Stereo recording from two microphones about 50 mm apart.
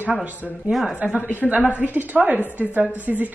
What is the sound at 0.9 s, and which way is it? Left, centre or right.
Speech, right.